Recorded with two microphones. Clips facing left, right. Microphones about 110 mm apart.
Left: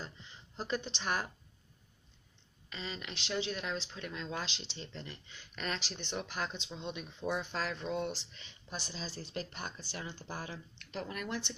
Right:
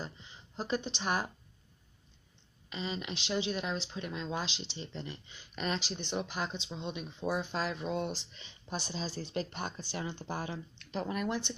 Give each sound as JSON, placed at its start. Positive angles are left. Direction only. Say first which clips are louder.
{"t": 0.6, "sound": "speech", "louder": "right 3 dB", "side_deg": -15}
{"t": 2.7, "sound": "speech", "louder": "right 5 dB", "side_deg": -15}
{"t": 7.9, "sound": "speech", "louder": "right 1 dB", "side_deg": -25}